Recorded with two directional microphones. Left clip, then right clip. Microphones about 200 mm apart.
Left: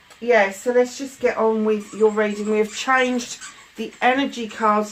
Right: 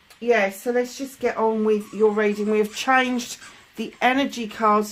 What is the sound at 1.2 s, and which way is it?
Speech, 45° right (ahead or behind).